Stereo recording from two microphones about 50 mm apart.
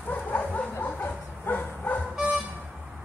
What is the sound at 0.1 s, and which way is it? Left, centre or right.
Bow-wow, left.